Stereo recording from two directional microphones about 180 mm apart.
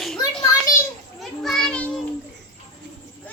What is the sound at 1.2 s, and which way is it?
Children playing, centre (ahead or behind).